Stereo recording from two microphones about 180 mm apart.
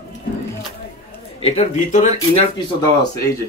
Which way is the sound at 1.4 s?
35° left (ahead or behind).